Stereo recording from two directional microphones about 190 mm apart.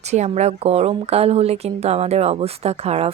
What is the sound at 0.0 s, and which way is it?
A woman's voice, 35° right (ahead or behind).